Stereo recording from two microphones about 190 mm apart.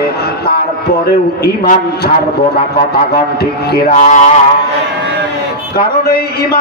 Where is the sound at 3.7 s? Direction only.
45° left (ahead or behind).